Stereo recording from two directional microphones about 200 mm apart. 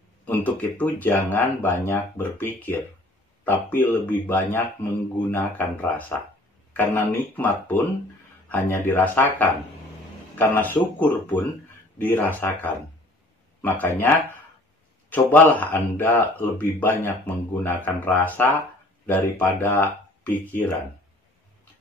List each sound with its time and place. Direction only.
0.3 s speech: 10° left (ahead or behind)